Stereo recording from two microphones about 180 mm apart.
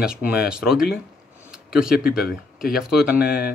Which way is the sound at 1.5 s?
5° right (ahead or behind).